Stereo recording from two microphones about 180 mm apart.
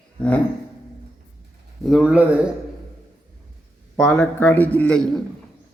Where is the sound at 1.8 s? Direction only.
Centre (ahead or behind).